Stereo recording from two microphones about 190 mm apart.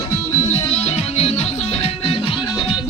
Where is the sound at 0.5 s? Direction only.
35° left (ahead or behind).